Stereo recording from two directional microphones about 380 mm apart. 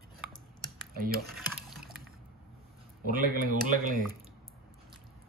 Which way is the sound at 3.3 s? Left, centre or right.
Right.